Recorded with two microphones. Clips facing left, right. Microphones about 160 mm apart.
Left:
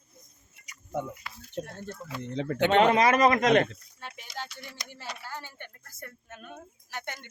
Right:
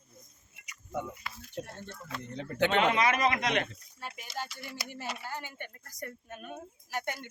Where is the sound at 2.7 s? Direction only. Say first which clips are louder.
Left 6 dB; 40° left (ahead or behind).